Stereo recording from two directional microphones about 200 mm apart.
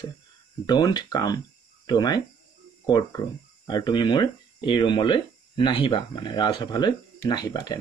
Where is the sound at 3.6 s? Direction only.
20° left (ahead or behind).